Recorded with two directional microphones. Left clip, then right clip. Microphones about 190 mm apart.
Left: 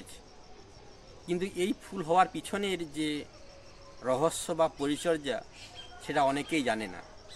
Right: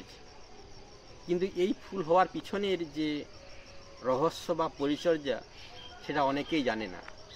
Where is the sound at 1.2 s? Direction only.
40° left (ahead or behind).